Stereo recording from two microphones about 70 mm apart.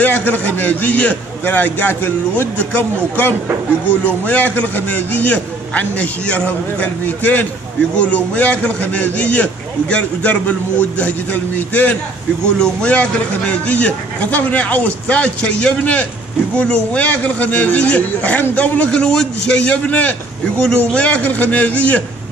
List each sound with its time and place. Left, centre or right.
0.0 s a man's voice: left